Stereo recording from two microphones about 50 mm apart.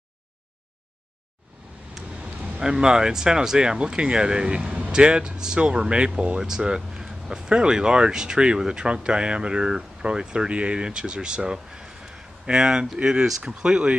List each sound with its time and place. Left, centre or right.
2.0 s vehicle: centre
2.6 s speech: centre